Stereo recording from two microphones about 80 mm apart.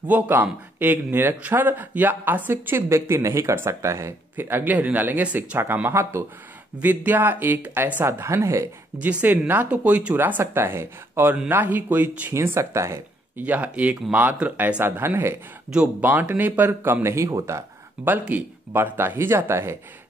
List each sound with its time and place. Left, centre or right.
0.0 s speech: right
6.8 s speech: right
9.0 s speech: right
12.4 s speech: right
13.4 s speech: centre; by 17.6 s right
18.2 s speech: right